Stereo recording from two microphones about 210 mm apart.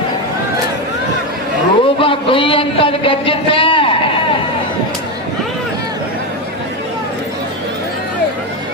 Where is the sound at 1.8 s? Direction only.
25° left (ahead or behind).